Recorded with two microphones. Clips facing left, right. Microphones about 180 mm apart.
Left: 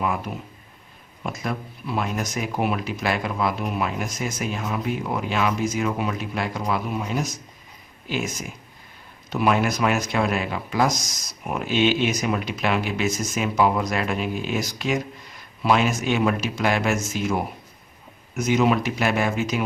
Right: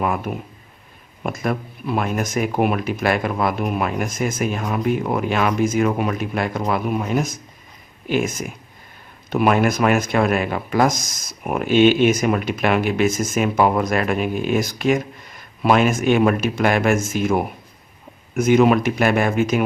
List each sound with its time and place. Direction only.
1.2 s speech: 55° right (ahead or behind)